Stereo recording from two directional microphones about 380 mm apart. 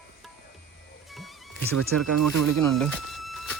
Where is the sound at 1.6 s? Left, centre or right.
Right.